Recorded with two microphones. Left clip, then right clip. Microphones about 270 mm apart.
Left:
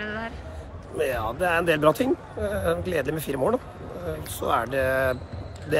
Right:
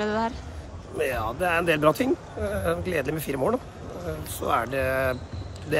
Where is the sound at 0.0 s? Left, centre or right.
Centre.